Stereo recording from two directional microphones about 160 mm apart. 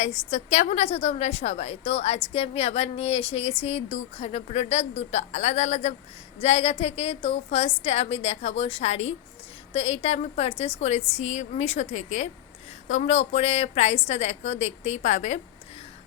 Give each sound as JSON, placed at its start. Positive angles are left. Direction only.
{"t": 0.0, "sound": "a woman's voice", "side_deg": 45}